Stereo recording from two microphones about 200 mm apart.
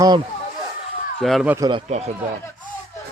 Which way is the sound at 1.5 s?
15° right (ahead or behind).